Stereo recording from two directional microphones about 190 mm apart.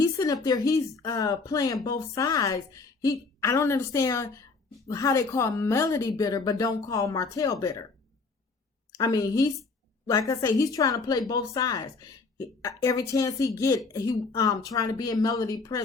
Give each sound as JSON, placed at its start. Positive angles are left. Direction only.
{"t": 0.0, "sound": "a sound", "side_deg": 15}
{"t": 0.4, "sound": "speech", "side_deg": 20}
{"t": 8.9, "sound": "a woman's voice", "side_deg": 20}